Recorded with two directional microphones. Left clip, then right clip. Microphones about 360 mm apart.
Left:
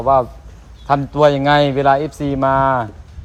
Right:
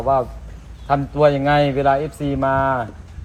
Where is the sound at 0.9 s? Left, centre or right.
Centre.